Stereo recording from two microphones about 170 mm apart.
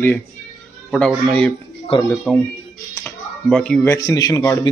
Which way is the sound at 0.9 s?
5° left (ahead or behind).